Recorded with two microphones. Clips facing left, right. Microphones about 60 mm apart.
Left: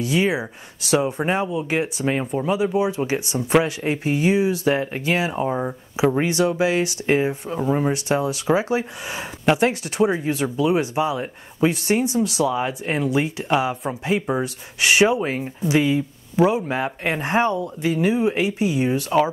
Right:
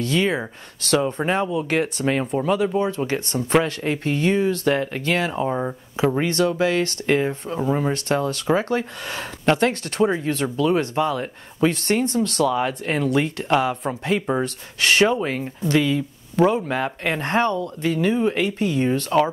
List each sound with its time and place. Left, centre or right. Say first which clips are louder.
0.0 s speech: left 1 dB; centre
6.1 s speech: left 1 dB; centre
16.3 s speech: even; centre